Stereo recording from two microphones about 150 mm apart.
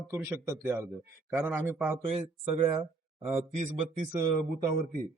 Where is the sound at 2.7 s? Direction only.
35° right (ahead or behind).